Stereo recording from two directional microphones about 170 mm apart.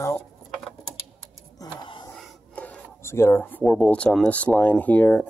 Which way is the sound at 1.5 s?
25° left (ahead or behind).